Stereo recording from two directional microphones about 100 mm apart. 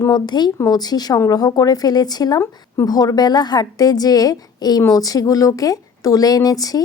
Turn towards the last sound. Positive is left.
turn(degrees=35)  # may be behind; listen again after turning